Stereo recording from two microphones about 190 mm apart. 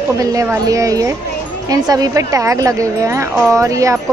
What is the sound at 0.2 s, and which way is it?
Speech, 15° right (ahead or behind).